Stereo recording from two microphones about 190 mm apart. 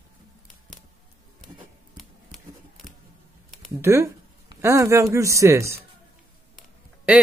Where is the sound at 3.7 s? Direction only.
15° right (ahead or behind).